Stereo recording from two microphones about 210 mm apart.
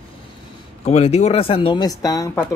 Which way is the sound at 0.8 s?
30° left (ahead or behind).